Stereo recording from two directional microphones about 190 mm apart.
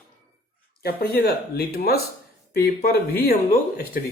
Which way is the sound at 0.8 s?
55° left (ahead or behind).